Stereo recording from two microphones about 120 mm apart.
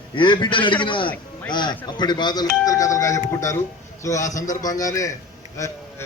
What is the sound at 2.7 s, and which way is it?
Speech, 30° left (ahead or behind).